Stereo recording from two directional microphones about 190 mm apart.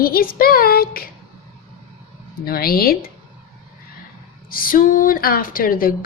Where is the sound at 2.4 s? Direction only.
50° left (ahead or behind).